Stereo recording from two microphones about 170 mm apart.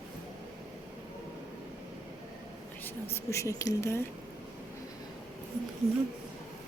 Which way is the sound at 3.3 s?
20° left (ahead or behind).